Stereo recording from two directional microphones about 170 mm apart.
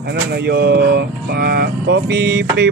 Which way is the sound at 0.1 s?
70° right (ahead or behind).